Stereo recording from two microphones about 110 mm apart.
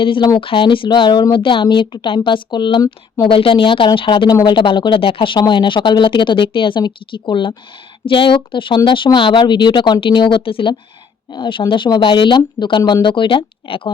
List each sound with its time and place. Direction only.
0.0 s speech: 50° left (ahead or behind)
3.3 s speech: 50° left (ahead or behind)